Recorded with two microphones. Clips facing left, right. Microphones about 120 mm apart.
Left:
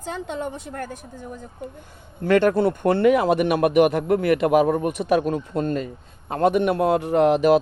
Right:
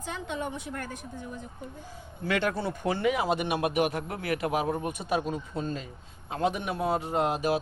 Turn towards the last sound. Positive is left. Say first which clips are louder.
# left 10 dB
turn(degrees=65)  # may be behind; listen again after turning